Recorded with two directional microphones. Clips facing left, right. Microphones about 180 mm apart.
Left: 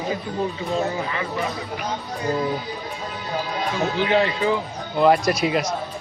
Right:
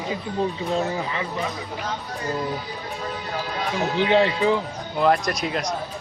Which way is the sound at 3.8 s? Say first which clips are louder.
Right 2 dB; 25° right (ahead or behind).